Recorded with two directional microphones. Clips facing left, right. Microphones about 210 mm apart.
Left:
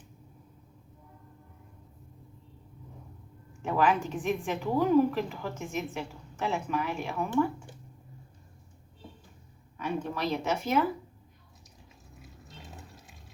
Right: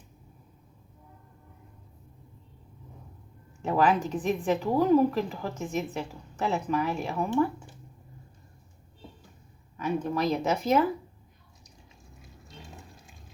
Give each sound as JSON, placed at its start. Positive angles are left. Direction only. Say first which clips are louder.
{"t": 3.6, "sound": "a woman's voice", "louder": "right 2 dB", "side_deg": -40}
{"t": 9.7, "sound": "a woman's voice", "louder": "right 4 dB", "side_deg": -40}